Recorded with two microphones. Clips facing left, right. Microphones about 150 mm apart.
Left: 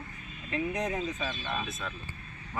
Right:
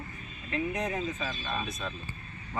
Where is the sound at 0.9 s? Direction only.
Centre (ahead or behind).